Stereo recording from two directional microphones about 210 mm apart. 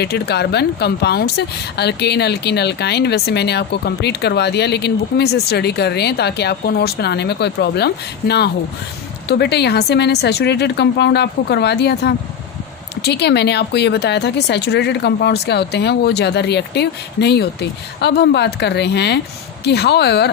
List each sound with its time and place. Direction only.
0.0 s speech: 50° left (ahead or behind)